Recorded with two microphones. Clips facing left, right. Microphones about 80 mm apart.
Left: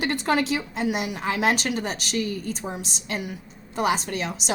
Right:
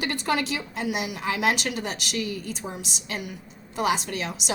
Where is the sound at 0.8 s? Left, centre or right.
Left.